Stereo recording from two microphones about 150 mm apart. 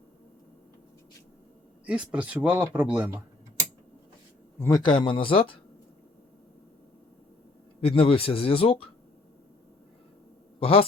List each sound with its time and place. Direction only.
1.9 s speech: 10° right (ahead or behind)
4.8 s speech: 30° left (ahead or behind)
7.8 s speech: 40° left (ahead or behind)
10.6 s speech: 40° left (ahead or behind)